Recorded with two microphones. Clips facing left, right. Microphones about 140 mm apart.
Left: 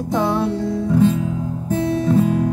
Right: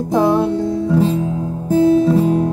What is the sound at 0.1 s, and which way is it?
Music, 15° right (ahead or behind).